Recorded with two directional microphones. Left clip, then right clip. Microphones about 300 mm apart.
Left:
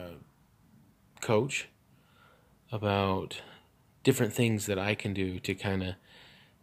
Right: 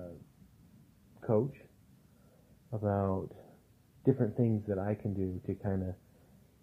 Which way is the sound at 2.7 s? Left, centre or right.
Centre.